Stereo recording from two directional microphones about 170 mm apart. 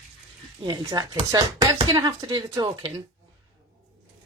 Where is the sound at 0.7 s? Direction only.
25° right (ahead or behind).